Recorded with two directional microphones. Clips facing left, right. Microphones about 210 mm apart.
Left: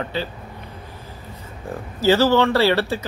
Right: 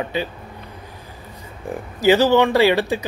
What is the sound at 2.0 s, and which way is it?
A man's voice, 15° right (ahead or behind).